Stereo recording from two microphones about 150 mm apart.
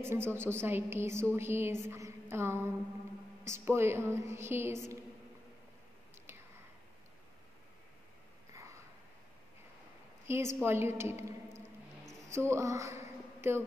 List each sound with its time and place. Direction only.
0.0 s a woman's voice: 15° right (ahead or behind)
10.2 s a woman's voice: 15° right (ahead or behind)